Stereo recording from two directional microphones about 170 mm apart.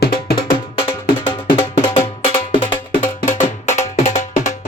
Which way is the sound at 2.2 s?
35° left (ahead or behind).